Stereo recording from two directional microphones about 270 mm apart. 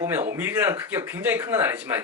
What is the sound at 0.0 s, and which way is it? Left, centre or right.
Speech, centre.